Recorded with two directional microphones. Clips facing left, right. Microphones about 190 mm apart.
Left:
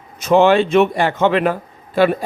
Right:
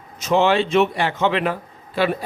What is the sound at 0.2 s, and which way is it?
A man's voice, 55° left (ahead or behind).